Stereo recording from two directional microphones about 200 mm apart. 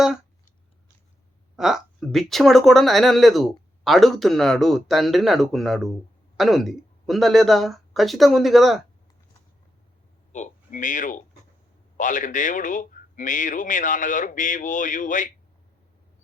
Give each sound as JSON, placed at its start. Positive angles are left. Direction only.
{"t": 1.5, "sound": "speech", "side_deg": 0}
{"t": 10.3, "sound": "speech", "side_deg": 40}